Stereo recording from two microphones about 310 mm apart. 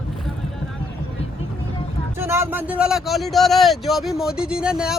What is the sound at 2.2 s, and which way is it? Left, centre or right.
Speech, centre.